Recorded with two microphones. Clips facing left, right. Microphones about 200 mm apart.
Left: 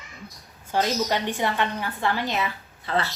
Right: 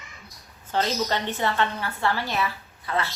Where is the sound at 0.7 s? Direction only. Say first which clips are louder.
Left 1 dB; 10° left (ahead or behind); by 3.1 s 30° left (ahead or behind).